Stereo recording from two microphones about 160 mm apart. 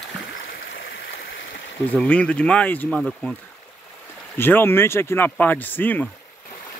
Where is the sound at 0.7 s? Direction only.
90° left.